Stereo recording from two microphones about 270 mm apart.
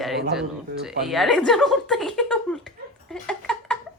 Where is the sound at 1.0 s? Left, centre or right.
Centre.